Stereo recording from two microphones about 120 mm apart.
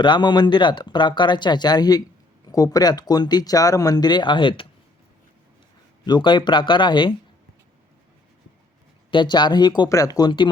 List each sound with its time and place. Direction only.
0.0 s speech: 40° left (ahead or behind)
6.1 s speech: 40° left (ahead or behind)
9.0 s speech: 40° left (ahead or behind)